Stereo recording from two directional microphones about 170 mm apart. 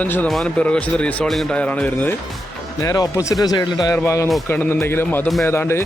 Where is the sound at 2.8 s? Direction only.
20° left (ahead or behind).